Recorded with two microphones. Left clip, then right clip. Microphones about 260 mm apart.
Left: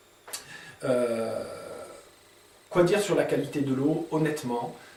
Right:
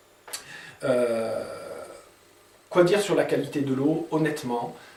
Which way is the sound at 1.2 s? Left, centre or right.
Centre.